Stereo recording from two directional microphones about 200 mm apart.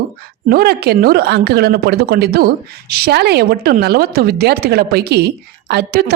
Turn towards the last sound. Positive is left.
turn(degrees=-50)  # may be behind; listen again after turning